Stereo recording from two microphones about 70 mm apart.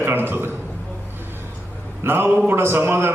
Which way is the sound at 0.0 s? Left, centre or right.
Right.